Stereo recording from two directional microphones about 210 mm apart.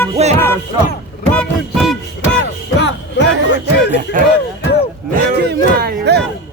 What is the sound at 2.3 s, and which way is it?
Music, 55° left (ahead or behind).